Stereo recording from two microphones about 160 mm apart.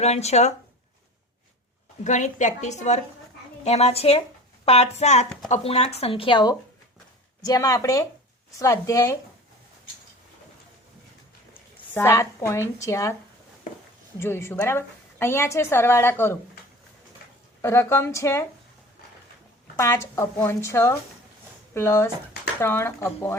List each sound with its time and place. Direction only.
0.0 s a woman's voice: 45° left (ahead or behind)
2.0 s a woman's voice: 50° left (ahead or behind); by 9.1 s 20° left (ahead or behind)
11.9 s a woman's voice: 15° left (ahead or behind)
14.2 s a woman's voice: 15° left (ahead or behind)
17.6 s a woman's voice: 15° left (ahead or behind)
19.7 s a woman's voice: 20° left (ahead or behind)